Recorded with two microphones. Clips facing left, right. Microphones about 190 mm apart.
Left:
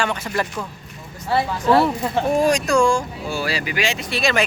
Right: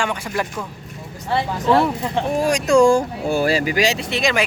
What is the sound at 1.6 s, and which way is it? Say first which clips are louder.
Speech: even; 10° left (ahead or behind).